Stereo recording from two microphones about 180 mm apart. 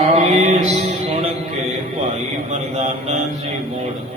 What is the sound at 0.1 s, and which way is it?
Mantra, 35° right (ahead or behind).